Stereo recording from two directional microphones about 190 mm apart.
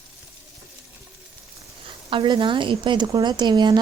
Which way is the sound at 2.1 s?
25° right (ahead or behind).